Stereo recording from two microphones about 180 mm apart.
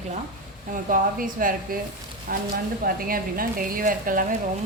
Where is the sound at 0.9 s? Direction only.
50° right (ahead or behind).